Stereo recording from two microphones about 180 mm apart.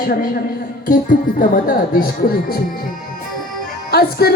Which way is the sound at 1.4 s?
50° left (ahead or behind).